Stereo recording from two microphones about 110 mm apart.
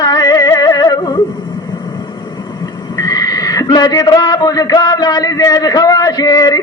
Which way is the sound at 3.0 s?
35° left (ahead or behind).